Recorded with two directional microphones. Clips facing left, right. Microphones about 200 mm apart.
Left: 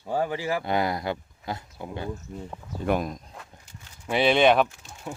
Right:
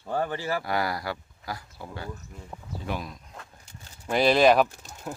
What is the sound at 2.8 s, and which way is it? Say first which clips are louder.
Speech: left 9 dB; 50° left (ahead or behind).